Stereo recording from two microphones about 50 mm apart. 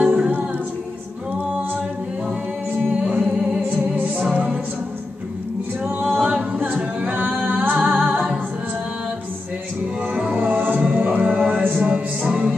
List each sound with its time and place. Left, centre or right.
0.0 s a capella: right
2.9 s music: right
6.1 s a capella: centre
6.6 s a capella: right
7.8 s music: right
10.1 s music: right
11.0 s music: right
11.2 s chant: right
11.6 s music: right